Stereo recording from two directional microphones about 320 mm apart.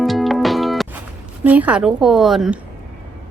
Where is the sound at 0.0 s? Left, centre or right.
Centre.